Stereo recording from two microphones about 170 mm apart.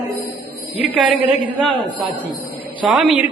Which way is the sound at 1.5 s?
30° right (ahead or behind).